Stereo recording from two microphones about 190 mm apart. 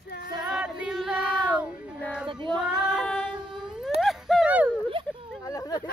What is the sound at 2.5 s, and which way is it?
Child singing, 5° left (ahead or behind).